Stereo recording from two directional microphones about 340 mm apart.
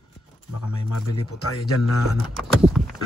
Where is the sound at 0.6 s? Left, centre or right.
Left.